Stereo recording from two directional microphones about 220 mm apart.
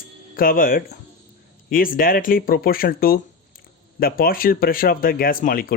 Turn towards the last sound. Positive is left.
turn(degrees=40)  # may be behind; listen again after turning